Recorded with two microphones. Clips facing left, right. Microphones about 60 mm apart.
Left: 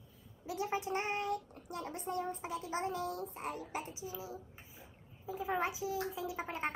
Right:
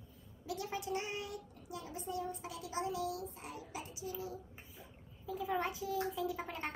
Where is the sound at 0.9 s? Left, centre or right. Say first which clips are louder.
Left 5 dB; left.